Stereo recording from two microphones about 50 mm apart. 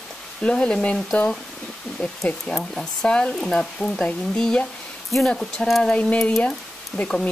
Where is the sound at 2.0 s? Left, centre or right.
Centre.